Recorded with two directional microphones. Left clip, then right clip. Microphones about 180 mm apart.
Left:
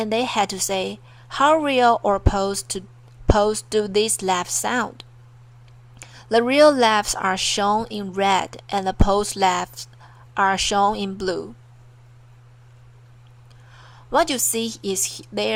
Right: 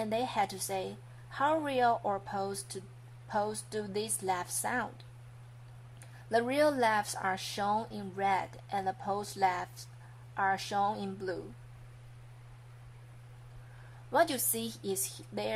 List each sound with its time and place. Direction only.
0.0 s speech: 20° left (ahead or behind)
14.1 s speech: 25° left (ahead or behind)